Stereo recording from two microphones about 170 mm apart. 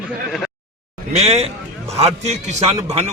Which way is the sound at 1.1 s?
40° right (ahead or behind).